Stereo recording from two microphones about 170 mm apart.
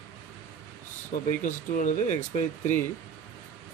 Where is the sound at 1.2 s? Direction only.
50° left (ahead or behind).